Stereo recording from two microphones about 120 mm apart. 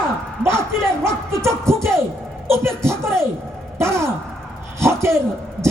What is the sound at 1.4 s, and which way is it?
Music, 20° right (ahead or behind).